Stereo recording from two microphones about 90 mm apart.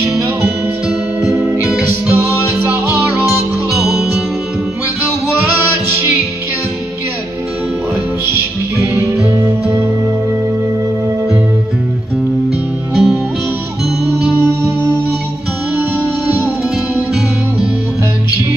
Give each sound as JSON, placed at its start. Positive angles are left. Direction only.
{"t": 1.8, "sound": "music", "side_deg": -20}
{"t": 3.7, "sound": "music", "side_deg": -5}
{"t": 8.9, "sound": "music", "side_deg": 40}
{"t": 12.9, "sound": "music", "side_deg": -10}